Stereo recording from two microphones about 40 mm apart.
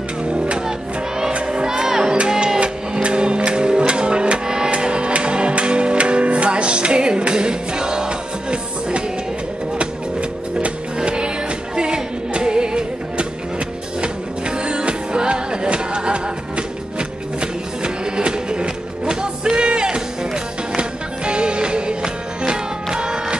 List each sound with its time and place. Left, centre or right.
0.2 s music: right
11.0 s music: right
14.6 s music: right
21.3 s music: right